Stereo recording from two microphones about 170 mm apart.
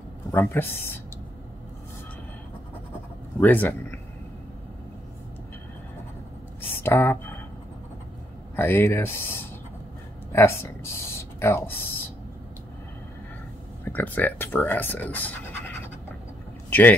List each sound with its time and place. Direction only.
0.3 s speech: 15° left (ahead or behind)
3.3 s speech: 10° left (ahead or behind)
6.7 s a sound: 15° left (ahead or behind)
8.5 s speech: 15° left (ahead or behind)
10.3 s speech: 15° left (ahead or behind)
13.8 s speech: 10° left (ahead or behind)